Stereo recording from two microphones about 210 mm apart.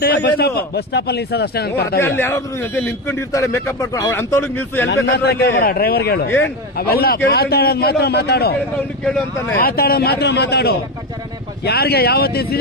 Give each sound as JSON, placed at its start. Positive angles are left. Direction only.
{"t": 0.0, "sound": "a man's voice", "side_deg": 50}
{"t": 2.0, "sound": "a man's voice", "side_deg": 10}
{"t": 5.1, "sound": "a man's voice", "side_deg": 50}
{"t": 9.6, "sound": "a man's voice", "side_deg": 45}